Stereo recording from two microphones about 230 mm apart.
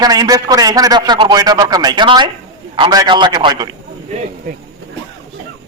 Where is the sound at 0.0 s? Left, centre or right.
Centre.